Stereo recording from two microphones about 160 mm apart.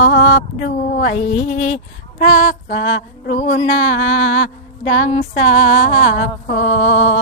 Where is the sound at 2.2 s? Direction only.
70° left (ahead or behind).